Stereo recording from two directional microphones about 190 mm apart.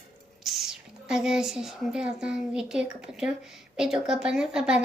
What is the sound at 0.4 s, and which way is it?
A woman's voice, centre (ahead or behind).